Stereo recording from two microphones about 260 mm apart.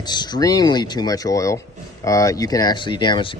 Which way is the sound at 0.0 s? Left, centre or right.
Centre.